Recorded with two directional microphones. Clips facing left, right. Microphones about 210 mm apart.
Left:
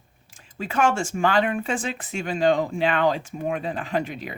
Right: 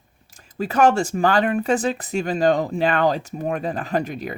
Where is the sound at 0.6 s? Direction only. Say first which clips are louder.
Right 5 dB; 40° right (ahead or behind).